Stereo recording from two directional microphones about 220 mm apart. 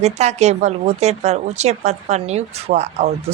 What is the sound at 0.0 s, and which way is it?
A woman's voice, 30° right (ahead or behind).